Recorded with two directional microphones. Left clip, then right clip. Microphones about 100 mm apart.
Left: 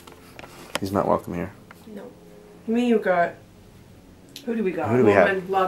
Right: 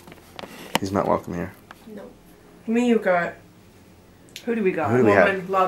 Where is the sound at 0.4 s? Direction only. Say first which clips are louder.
Right 4 dB; 5° left (ahead or behind).